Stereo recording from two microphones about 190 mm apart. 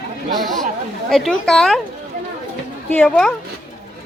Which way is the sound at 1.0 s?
Centre (ahead or behind).